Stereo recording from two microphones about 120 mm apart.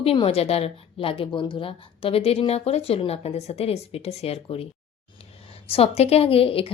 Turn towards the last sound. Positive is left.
turn(degrees=50)  # may be behind; listen again after turning